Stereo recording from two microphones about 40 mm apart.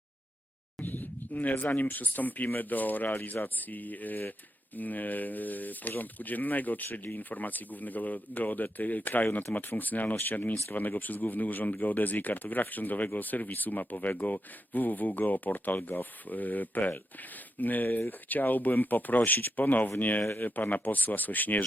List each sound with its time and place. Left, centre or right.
0.8 s speech: left